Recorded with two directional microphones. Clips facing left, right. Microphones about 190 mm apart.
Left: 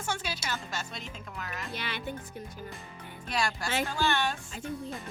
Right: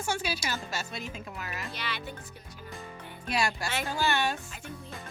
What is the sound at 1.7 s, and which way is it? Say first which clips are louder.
Speech: left 3 dB; 50° left (ahead or behind).